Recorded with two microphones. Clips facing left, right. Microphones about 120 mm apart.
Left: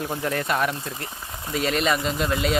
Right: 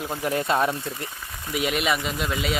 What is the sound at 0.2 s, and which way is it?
Speech, 20° right (ahead or behind).